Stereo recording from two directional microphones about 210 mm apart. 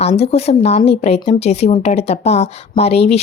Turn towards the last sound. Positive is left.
turn(degrees=30)  # may be behind; listen again after turning